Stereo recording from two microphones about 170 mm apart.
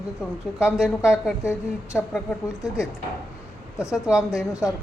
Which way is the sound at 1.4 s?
15° left (ahead or behind).